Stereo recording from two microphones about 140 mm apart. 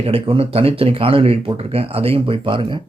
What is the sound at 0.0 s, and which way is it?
Speech, 45° right (ahead or behind).